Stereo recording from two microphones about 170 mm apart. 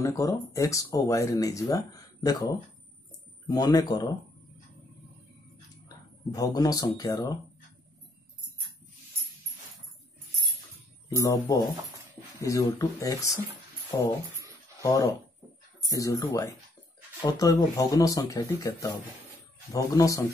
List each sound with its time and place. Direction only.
0.0 s speech: 20° left (ahead or behind)
3.4 s speech: 25° left (ahead or behind)
6.3 s speech: 20° left (ahead or behind)
11.1 s speech: 20° left (ahead or behind)